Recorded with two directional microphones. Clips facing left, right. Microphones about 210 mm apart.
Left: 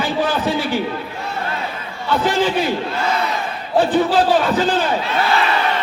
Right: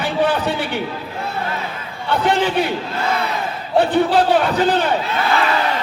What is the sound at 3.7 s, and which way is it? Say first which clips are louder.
Speech: even; 60° right (ahead or behind).